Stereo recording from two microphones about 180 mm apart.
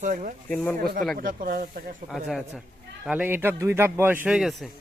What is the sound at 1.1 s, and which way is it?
Speech, 50° right (ahead or behind).